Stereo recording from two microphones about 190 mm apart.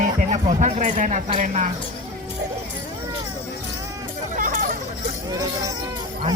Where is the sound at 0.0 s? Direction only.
40° right (ahead or behind).